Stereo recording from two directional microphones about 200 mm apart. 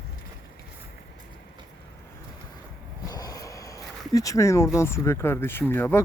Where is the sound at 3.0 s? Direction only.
20° left (ahead or behind).